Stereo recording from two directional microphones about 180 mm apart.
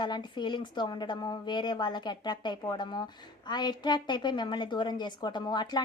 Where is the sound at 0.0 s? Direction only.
25° left (ahead or behind).